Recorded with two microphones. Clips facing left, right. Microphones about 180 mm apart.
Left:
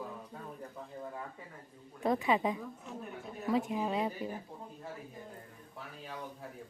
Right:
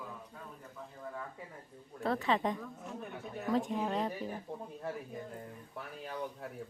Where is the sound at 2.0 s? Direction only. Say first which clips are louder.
Left 2 dB; 10° left (ahead or behind).